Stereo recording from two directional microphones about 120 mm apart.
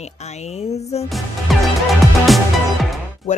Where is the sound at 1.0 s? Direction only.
Centre (ahead or behind).